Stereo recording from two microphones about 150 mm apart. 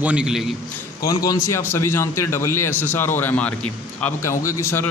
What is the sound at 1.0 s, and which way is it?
A man's voice, 25° left (ahead or behind).